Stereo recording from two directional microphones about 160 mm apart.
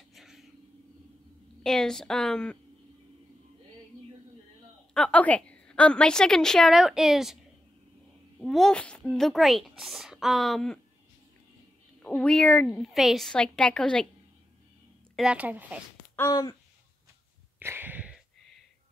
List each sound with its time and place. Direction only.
0.1 s a sound: centre (ahead or behind)
1.6 s a woman's voice: 5° left (ahead or behind)
4.9 s a woman's voice: 5° left (ahead or behind)
8.4 s a woman's voice: 5° left (ahead or behind)
12.0 s a woman's voice: 5° left (ahead or behind)
15.1 s speech: 5° right (ahead or behind)
16.3 s speech: 25° left (ahead or behind)
17.6 s a sound: 10° right (ahead or behind)